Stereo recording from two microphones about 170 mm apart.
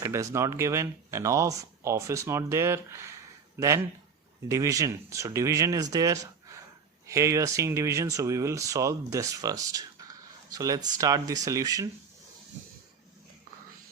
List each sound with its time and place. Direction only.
0.0 s speech: 20° right (ahead or behind)
4.4 s speech: 20° right (ahead or behind)